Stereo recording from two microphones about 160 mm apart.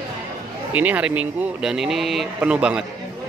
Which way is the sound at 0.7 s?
10° right (ahead or behind).